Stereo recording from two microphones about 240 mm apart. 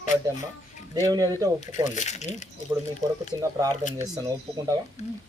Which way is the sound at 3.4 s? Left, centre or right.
Centre.